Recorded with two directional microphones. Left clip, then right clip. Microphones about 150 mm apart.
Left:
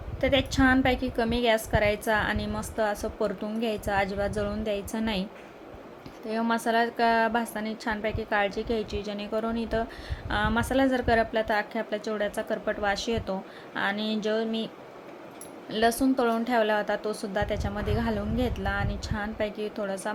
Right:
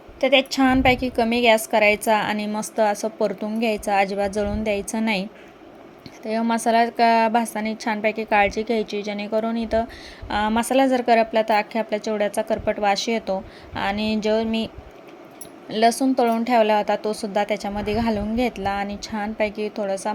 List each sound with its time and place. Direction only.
0.2 s a woman's voice: 35° right (ahead or behind)
6.2 s a woman's voice: 30° right (ahead or behind)
15.7 s a woman's voice: 30° right (ahead or behind)